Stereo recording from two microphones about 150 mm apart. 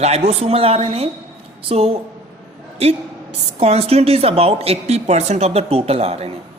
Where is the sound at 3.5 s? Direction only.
45° right (ahead or behind).